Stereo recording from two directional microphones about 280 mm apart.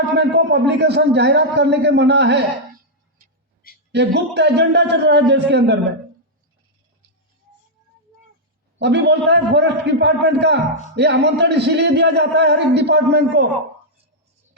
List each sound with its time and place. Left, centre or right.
0.0 s speech: right
3.9 s speech: right
8.8 s speech: right